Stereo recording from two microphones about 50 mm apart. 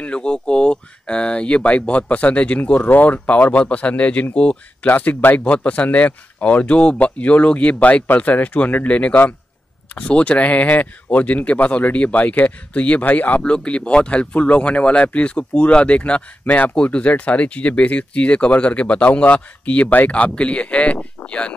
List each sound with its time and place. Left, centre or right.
0.0 s speech: left
13.4 s speech: centre